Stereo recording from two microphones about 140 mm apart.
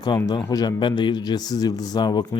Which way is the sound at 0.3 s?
25° left (ahead or behind).